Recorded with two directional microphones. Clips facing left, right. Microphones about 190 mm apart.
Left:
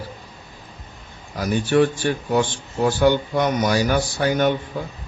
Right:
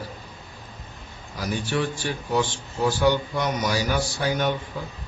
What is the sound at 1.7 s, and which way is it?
Speech, 55° left (ahead or behind).